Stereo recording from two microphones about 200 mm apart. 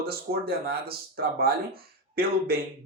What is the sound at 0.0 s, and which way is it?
Speech, 50° right (ahead or behind).